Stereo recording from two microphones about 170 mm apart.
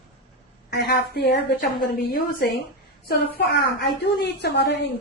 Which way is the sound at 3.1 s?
75° left (ahead or behind).